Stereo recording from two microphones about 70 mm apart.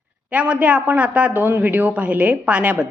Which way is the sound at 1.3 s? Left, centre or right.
Right.